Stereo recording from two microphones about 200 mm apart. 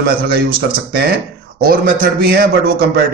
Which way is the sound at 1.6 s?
45° right (ahead or behind).